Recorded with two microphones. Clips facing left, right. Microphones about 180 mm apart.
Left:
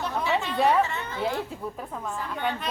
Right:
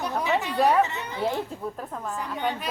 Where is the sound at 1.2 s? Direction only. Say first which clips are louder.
Right 2 dB; centre (ahead or behind).